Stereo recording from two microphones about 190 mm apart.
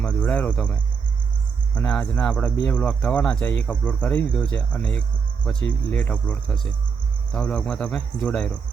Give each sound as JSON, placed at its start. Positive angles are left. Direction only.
{"t": 0.0, "sound": "cricket", "side_deg": 5}
{"t": 1.7, "sound": "speech", "side_deg": 5}
{"t": 7.3, "sound": "cricket", "side_deg": 5}